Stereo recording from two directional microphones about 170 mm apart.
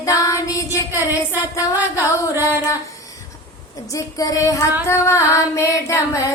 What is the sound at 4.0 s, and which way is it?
Music, 20° left (ahead or behind).